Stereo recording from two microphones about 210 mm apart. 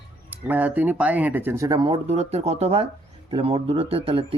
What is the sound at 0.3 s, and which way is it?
Speech, 10° right (ahead or behind).